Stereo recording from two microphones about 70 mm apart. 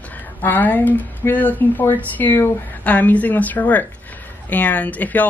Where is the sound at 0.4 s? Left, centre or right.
Left.